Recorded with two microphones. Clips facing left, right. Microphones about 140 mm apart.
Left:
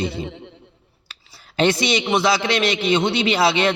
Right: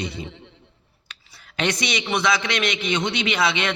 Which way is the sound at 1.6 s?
30° left (ahead or behind).